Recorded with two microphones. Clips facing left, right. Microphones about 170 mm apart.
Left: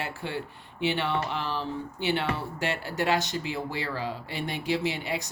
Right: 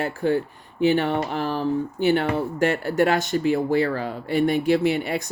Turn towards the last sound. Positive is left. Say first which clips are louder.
# right 8 dB
turn(degrees=-55)  # may be behind; listen again after turning